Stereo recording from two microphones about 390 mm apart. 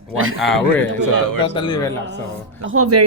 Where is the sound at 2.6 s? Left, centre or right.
Right.